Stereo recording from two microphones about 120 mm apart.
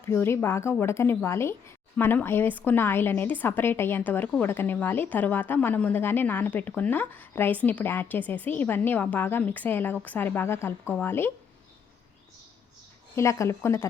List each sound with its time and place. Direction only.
0.0 s a woman's voice: 20° left (ahead or behind)
13.1 s a woman's voice: 25° left (ahead or behind)